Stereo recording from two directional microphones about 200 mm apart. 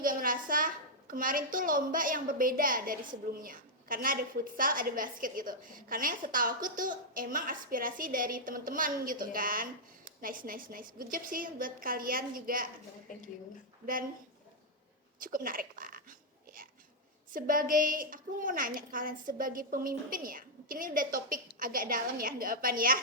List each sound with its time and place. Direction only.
0.0 s a woman's voice: 45° right (ahead or behind)
15.2 s whispering: 45° right (ahead or behind)
17.3 s a woman's voice: 45° right (ahead or behind)